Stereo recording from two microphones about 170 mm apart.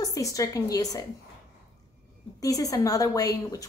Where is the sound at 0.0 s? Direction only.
20° left (ahead or behind).